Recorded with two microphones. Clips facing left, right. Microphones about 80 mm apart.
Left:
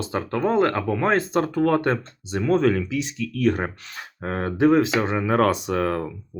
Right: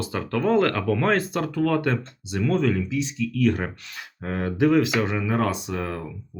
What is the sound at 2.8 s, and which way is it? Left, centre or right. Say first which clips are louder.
Speech: right 1 dB; left.